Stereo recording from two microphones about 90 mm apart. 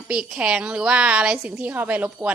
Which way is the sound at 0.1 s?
10° right (ahead or behind).